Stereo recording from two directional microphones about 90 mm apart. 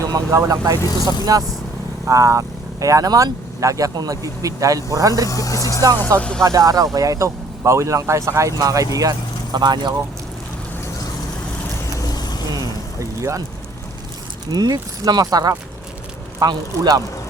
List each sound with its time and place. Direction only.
0.0 s speech: 35° right (ahead or behind)
5.3 s speech: 40° left (ahead or behind)
6.1 s music: 15° left (ahead or behind)
6.4 s speech: 40° right (ahead or behind)
11.9 s vehicle: 45° left (ahead or behind)
13.0 s vehicle: 35° right (ahead or behind)
14.5 s speech: 45° right (ahead or behind)